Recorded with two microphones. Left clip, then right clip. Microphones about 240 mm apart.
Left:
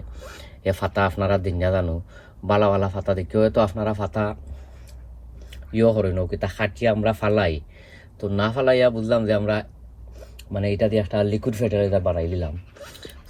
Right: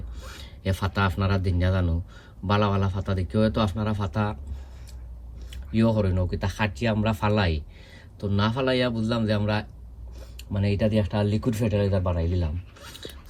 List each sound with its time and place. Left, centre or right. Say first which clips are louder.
0.2 s speech: left 6 dB; centre
5.7 s speech: left 6 dB; centre
10.2 s a sound: left 5 dB; centre
11.4 s speech: left 4 dB; right